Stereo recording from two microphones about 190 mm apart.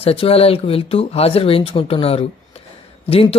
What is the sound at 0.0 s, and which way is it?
Speech, 30° left (ahead or behind).